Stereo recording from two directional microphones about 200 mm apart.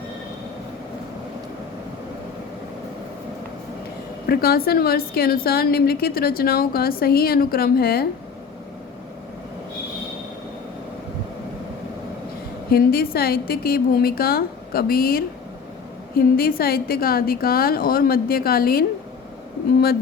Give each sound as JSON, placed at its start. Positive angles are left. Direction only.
{"t": 4.3, "sound": "a woman's voice", "side_deg": 50}
{"t": 12.7, "sound": "a woman's voice", "side_deg": 50}